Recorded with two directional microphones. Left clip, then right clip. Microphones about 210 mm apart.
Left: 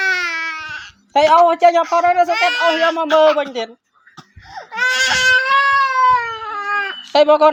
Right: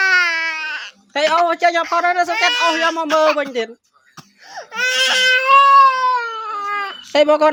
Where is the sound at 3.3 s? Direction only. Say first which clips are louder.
Even; 50° right (ahead or behind).